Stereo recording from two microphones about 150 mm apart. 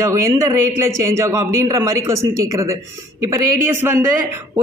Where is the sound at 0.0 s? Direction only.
20° right (ahead or behind).